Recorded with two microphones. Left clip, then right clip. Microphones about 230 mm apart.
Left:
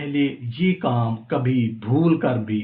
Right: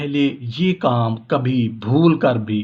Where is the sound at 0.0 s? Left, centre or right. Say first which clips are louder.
Right 3 dB; right.